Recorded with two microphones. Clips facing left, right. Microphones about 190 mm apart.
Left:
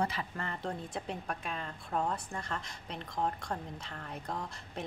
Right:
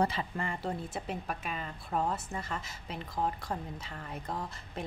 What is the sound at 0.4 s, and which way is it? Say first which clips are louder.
Speech: right 3 dB; 10° right (ahead or behind).